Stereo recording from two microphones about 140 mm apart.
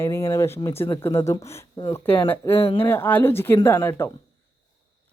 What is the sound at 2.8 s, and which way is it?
Speech, 15° left (ahead or behind).